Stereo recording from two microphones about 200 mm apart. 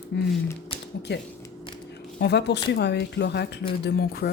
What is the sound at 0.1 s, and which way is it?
Speech, 60° left (ahead or behind).